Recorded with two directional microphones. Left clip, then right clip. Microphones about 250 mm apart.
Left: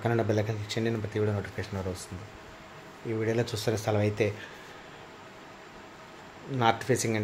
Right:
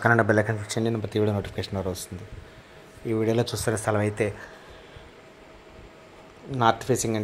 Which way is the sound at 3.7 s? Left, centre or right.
Centre.